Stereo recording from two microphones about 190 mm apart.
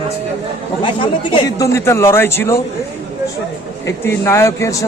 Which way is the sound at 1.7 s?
15° left (ahead or behind).